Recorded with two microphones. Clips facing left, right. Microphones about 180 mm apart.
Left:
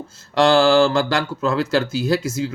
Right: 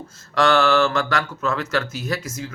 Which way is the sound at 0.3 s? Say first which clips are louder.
Left 4 dB; 30° left (ahead or behind).